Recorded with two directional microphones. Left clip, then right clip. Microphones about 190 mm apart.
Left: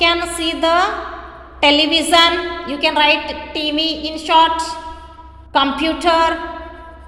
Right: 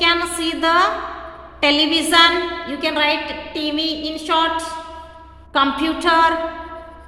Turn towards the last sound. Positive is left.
turn(degrees=10)  # may be behind; listen again after turning